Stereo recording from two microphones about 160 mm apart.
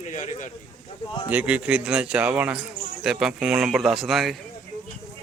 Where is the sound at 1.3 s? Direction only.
5° right (ahead or behind).